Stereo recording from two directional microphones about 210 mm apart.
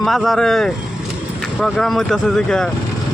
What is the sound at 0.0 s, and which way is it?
Speech, centre (ahead or behind).